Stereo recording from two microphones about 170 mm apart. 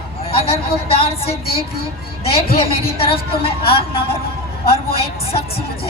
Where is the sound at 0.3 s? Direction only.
35° left (ahead or behind).